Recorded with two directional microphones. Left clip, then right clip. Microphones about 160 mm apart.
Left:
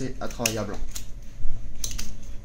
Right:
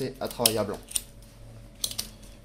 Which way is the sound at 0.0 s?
30° right (ahead or behind).